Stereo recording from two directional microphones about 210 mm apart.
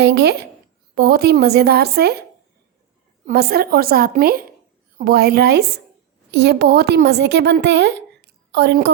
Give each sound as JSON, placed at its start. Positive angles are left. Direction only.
{"t": 0.0, "sound": "a woman's voice", "side_deg": -50}
{"t": 3.2, "sound": "a woman's voice", "side_deg": -50}